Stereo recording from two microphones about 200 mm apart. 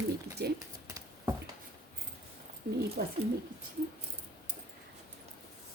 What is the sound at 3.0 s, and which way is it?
Speech, 45° right (ahead or behind).